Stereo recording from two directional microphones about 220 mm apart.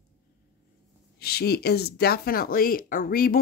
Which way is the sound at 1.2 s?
45° left (ahead or behind).